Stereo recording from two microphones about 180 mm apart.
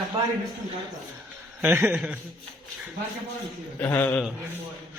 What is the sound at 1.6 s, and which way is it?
Speech, 10° right (ahead or behind).